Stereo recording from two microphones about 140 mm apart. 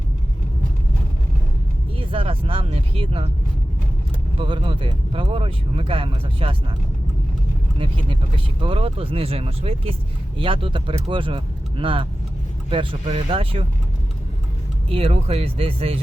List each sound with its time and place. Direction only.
2.0 s speech: 40° right (ahead or behind)
4.4 s speech: 35° right (ahead or behind)
7.8 s speech: 40° right (ahead or behind)
14.8 s speech: 45° right (ahead or behind)